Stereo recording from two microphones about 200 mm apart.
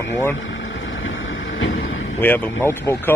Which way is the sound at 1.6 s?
80° left.